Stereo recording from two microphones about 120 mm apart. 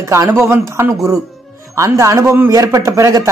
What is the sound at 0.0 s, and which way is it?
Speech, 25° right (ahead or behind).